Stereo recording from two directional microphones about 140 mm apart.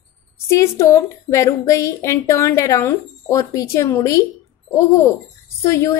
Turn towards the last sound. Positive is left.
turn(degrees=20)  # may be behind; listen again after turning